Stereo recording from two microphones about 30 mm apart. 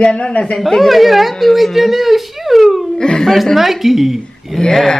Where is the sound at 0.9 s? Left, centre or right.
Centre.